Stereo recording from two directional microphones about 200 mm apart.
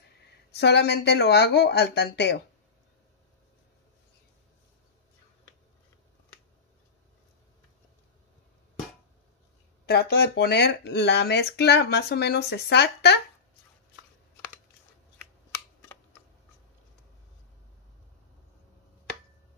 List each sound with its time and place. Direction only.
0.5 s speech: 55° left (ahead or behind)
9.8 s speech: 55° left (ahead or behind)